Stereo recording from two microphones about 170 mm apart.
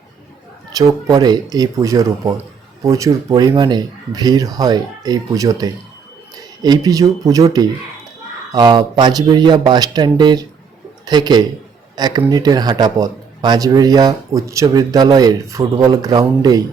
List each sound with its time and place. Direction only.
0.8 s a man's voice: 20° right (ahead or behind)